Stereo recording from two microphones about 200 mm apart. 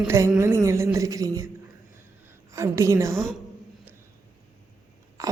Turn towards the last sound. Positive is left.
turn(degrees=-15)  # may be behind; listen again after turning